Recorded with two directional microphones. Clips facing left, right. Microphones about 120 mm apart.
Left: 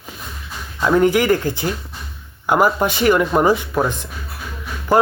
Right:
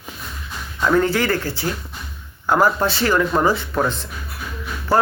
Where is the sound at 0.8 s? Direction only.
15° left (ahead or behind).